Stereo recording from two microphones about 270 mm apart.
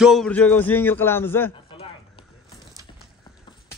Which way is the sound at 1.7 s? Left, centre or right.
Centre.